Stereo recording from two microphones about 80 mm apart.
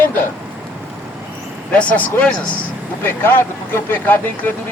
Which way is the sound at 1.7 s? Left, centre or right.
Centre.